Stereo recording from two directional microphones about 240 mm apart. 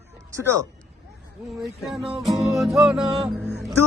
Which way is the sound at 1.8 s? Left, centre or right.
Centre.